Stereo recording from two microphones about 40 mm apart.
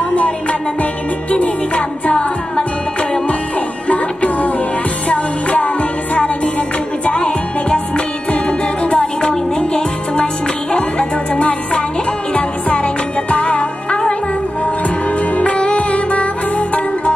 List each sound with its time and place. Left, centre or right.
0.1 s music: left
15.3 s music: left